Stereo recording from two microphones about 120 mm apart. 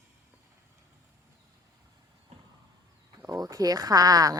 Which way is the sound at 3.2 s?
30° right (ahead or behind).